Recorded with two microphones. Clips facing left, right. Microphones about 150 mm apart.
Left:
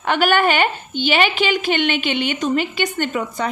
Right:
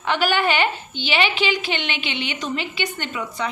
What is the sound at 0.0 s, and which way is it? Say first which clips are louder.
A woman's voice: left 4 dB; 50° left (ahead or behind).